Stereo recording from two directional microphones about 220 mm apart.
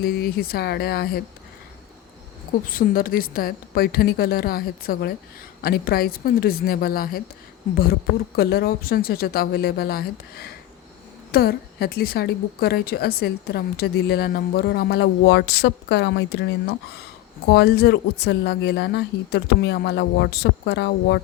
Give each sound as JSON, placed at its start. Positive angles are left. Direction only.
{"t": 0.0, "sound": "a woman's voice", "side_deg": 45}
{"t": 2.6, "sound": "a woman's voice", "side_deg": 40}
{"t": 8.4, "sound": "a woman's voice", "side_deg": 45}